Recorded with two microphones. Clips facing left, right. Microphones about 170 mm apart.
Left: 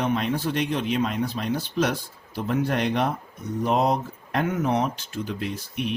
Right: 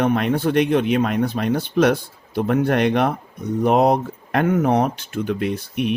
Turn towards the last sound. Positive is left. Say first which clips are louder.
# right 7 dB
turn(degrees=-60)  # may be behind; listen again after turning